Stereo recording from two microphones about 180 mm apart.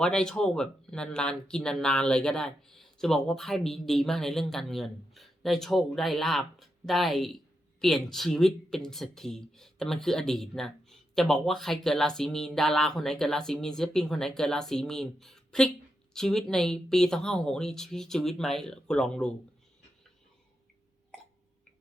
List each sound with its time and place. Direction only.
0.0 s speech: 5° left (ahead or behind)